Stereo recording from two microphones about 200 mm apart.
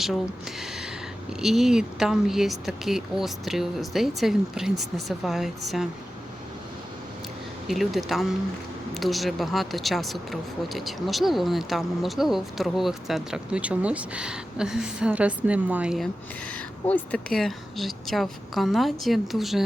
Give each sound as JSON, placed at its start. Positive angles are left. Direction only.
{"t": 1.3, "sound": "speech", "side_deg": 0}
{"t": 7.7, "sound": "speech", "side_deg": 0}
{"t": 16.5, "sound": "speech", "side_deg": 5}